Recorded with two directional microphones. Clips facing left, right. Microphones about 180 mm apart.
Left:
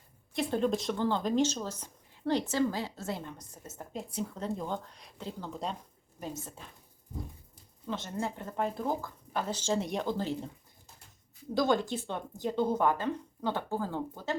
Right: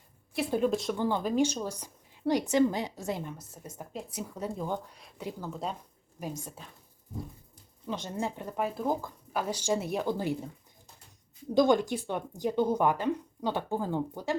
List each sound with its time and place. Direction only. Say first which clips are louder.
0.3 s a woman's voice: right 2 dB; 5° right (ahead or behind)
0.9 s speech: right 1 dB; 15° right (ahead or behind)
7.9 s speech: right 1 dB; 15° right (ahead or behind)
11.5 s speech: right 4 dB; 15° right (ahead or behind)